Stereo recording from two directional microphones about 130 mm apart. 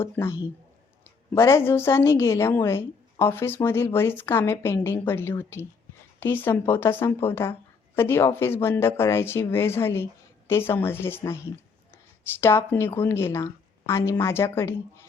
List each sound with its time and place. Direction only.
0.0 s a woman's voice: 20° left (ahead or behind)